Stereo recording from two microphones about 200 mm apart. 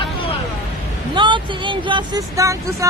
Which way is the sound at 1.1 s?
25° right (ahead or behind).